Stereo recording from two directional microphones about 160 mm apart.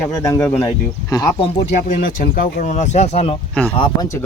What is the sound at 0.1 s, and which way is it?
Speech, 20° left (ahead or behind).